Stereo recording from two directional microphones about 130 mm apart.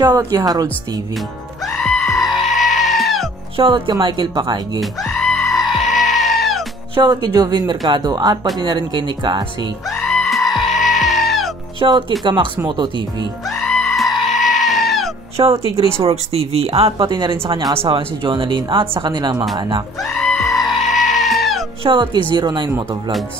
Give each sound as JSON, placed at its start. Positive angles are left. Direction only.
{"t": 0.3, "sound": "speech", "side_deg": -30}
{"t": 1.8, "sound": "goat", "side_deg": 5}
{"t": 3.5, "sound": "speech", "side_deg": -40}
{"t": 4.7, "sound": "goat", "side_deg": 5}
{"t": 7.0, "sound": "speech", "side_deg": -35}
{"t": 9.9, "sound": "goat", "side_deg": 5}
{"t": 11.8, "sound": "speech", "side_deg": -35}
{"t": 13.6, "sound": "goat", "side_deg": 5}
{"t": 15.3, "sound": "speech", "side_deg": -50}
{"t": 17.1, "sound": "speech", "side_deg": -35}
{"t": 20.2, "sound": "goat", "side_deg": 5}
{"t": 21.8, "sound": "speech", "side_deg": -35}